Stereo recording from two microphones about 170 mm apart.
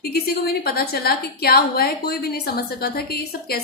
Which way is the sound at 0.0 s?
65° left (ahead or behind).